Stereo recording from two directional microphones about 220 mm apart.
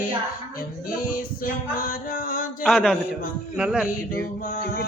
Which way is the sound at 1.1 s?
40° left (ahead or behind).